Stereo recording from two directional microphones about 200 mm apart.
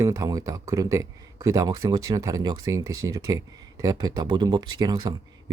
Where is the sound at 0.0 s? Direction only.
15° right (ahead or behind).